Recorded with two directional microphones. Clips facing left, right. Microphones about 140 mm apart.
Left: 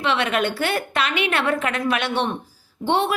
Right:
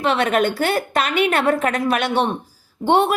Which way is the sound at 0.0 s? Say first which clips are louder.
Right 4 dB; 45° right (ahead or behind).